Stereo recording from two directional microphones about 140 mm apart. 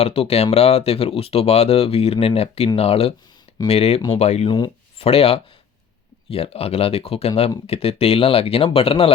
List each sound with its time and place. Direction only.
0.0 s speech: 45° left (ahead or behind)
4.4 s speech: 35° left (ahead or behind)